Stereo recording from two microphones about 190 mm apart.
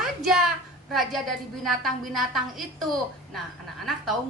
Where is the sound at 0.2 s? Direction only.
Centre (ahead or behind).